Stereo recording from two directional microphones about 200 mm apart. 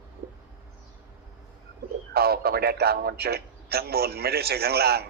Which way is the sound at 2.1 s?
50° right (ahead or behind).